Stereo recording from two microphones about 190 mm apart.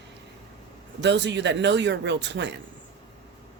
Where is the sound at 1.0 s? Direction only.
65° right (ahead or behind).